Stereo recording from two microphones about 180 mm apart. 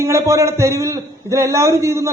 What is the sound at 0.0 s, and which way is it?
A man's voice, 15° right (ahead or behind).